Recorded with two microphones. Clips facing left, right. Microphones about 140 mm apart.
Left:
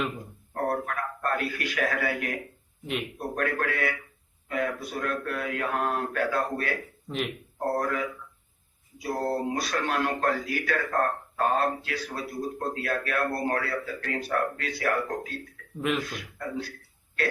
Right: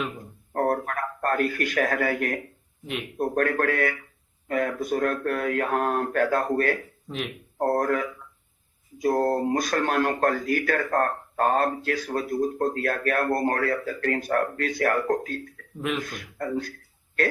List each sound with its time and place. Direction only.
0.5 s a sound: 45° right (ahead or behind)
3.2 s speech: 45° right (ahead or behind)
7.1 s speech: centre (ahead or behind)
7.6 s speech: 45° right (ahead or behind)